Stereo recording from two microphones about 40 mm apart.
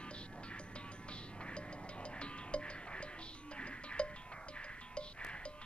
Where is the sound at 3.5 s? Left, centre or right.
Left.